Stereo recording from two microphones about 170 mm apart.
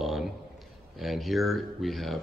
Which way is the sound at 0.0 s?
Centre (ahead or behind).